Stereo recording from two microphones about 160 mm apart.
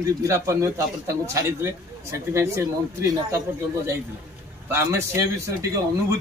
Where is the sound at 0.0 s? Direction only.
20° right (ahead or behind).